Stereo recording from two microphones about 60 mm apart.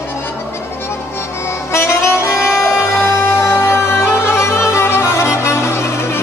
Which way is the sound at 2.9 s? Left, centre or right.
Left.